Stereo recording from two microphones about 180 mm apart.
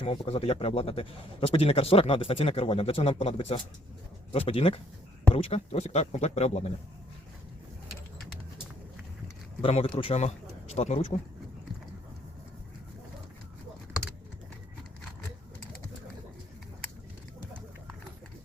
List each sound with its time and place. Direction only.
0.0 s a man's voice: 30° left (ahead or behind)
9.6 s a man's voice: 30° left (ahead or behind)